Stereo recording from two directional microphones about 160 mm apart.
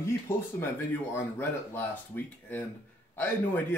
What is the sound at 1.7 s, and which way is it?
Speech, 10° left (ahead or behind).